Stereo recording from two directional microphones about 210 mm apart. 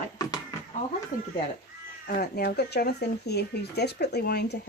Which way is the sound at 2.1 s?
45° left (ahead or behind).